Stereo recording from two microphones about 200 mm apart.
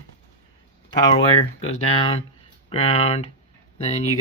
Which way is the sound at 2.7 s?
30° left (ahead or behind).